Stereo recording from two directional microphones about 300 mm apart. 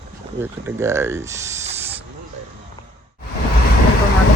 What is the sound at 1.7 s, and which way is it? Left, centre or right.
Hiss, centre.